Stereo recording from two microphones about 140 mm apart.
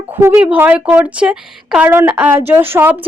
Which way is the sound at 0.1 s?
15° right (ahead or behind).